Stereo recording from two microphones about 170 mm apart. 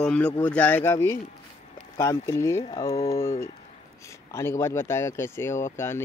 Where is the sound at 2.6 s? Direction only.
35° left (ahead or behind).